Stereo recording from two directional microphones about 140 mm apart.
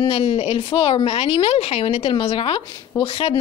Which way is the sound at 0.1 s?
45° left (ahead or behind).